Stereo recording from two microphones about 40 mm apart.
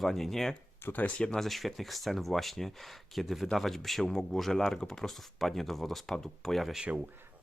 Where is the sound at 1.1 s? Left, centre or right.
Left.